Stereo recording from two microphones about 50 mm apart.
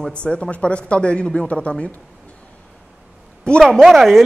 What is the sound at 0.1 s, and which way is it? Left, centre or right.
Speech, left.